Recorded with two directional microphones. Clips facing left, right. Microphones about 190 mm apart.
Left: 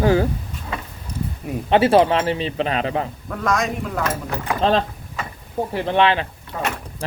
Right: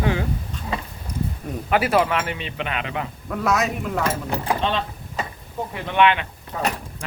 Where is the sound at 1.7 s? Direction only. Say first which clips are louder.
Left 5 dB; 30° left (ahead or behind).